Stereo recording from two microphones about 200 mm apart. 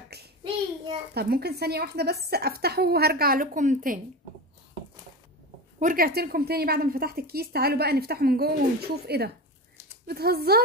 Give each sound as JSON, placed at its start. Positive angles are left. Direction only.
{"t": 1.1, "sound": "speech", "side_deg": -50}
{"t": 5.8, "sound": "speech", "side_deg": -45}